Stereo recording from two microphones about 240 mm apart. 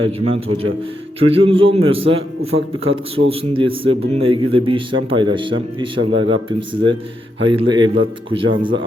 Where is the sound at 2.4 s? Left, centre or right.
Right.